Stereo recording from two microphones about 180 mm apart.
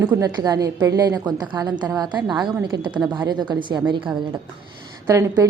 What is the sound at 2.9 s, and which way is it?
Speech, 5° right (ahead or behind).